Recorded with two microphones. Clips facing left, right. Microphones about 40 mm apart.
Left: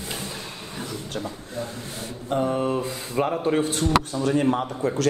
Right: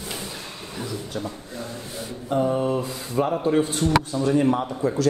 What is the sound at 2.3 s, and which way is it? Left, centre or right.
Mantra, left.